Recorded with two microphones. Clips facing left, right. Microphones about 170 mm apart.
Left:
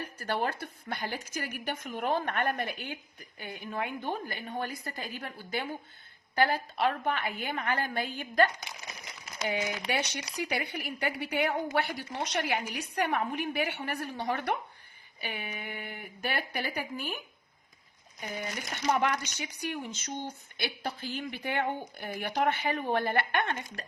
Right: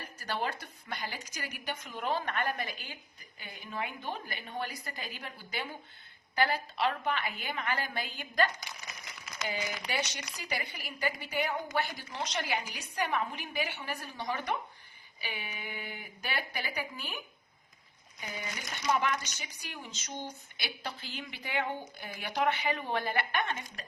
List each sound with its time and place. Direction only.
0.0 s a woman's voice: 50° left (ahead or behind)
9.5 s speech: 60° left (ahead or behind)
15.2 s a woman's voice: 50° left (ahead or behind)
18.2 s speech: 50° left (ahead or behind)